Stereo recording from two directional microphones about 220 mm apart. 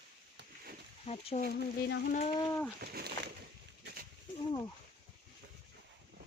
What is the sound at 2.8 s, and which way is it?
Speech, 45° right (ahead or behind).